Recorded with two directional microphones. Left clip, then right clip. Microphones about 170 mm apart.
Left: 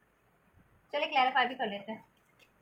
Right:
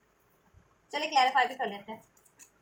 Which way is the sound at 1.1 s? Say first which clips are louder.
Right 3 dB; 15° right (ahead or behind).